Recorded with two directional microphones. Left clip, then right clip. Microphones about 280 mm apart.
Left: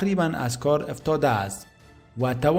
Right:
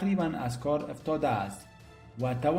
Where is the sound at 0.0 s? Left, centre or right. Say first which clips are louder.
Left 6 dB; left.